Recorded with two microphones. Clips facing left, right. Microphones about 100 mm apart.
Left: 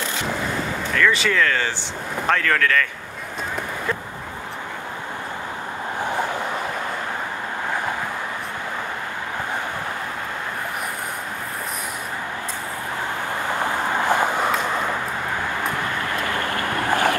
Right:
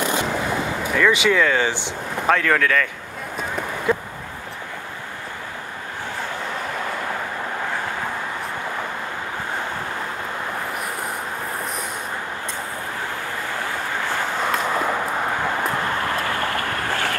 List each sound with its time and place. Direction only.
0.9 s speech: 15° right (ahead or behind)
14.0 s a sound: 15° left (ahead or behind)
16.5 s boat: 20° left (ahead or behind)